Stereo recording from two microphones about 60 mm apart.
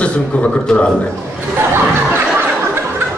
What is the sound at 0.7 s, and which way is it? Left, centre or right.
Speech, centre.